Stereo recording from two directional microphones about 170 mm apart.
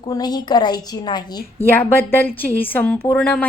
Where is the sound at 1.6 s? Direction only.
10° left (ahead or behind).